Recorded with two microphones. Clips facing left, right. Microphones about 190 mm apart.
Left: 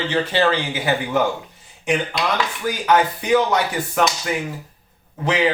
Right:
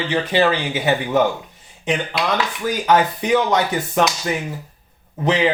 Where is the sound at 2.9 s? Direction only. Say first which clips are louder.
Even; 25° right (ahead or behind).